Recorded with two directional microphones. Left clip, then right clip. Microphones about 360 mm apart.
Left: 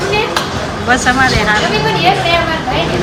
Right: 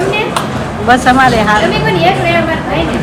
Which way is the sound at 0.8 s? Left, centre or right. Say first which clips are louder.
Right 4 dB; centre.